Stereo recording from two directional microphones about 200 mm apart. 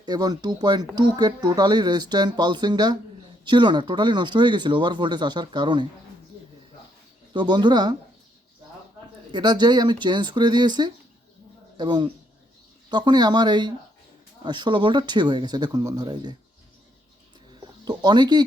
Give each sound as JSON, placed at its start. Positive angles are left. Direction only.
{"t": 0.0, "sound": "speech", "side_deg": -20}
{"t": 7.3, "sound": "speech", "side_deg": -20}
{"t": 9.3, "sound": "speech", "side_deg": -20}
{"t": 17.8, "sound": "speech", "side_deg": -20}